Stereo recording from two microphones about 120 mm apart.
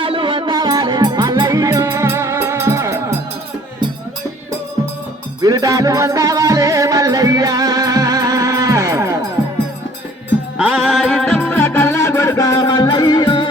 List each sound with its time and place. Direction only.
0.0 s music: 45° right (ahead or behind); by 3.0 s 25° right (ahead or behind)
5.4 s music: 30° right (ahead or behind)
10.6 s music: 5° right (ahead or behind); by 13.5 s 40° left (ahead or behind)